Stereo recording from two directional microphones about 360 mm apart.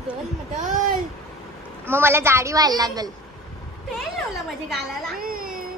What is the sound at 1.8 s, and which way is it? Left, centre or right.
A woman's voice, centre.